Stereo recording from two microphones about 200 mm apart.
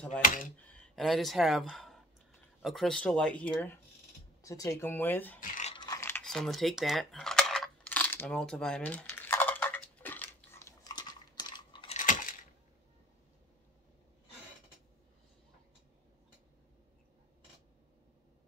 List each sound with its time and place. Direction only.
0.9 s speech: centre (ahead or behind)
5.4 s speech: 45° left (ahead or behind)
5.7 s typing: 20° left (ahead or behind)
12.0 s a sound: 40° left (ahead or behind)